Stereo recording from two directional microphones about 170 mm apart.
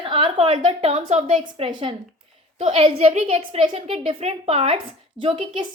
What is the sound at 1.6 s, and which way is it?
A woman's voice, 30° right (ahead or behind).